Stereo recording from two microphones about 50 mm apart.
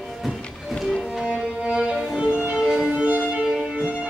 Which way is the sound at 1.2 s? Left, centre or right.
Centre.